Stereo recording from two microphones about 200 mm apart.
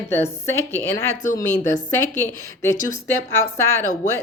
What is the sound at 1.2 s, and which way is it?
Speech, 40° left (ahead or behind).